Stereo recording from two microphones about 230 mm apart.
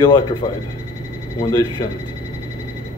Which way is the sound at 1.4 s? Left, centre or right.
Centre.